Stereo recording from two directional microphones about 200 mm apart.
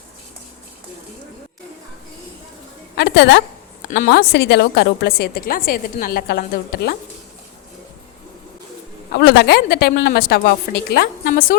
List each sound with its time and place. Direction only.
2.9 s a woman's voice: 60° left (ahead or behind)
3.8 s a woman's voice: 45° left (ahead or behind)
9.1 s a woman's voice: 55° left (ahead or behind)